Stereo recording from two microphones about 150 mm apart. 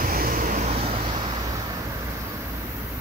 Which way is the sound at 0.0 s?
70° right (ahead or behind).